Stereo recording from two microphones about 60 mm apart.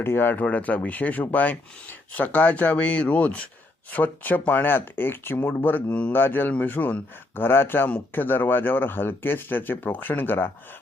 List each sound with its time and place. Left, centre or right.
0.0 s speech: left
0.4 s speech: left
5.6 s speech: left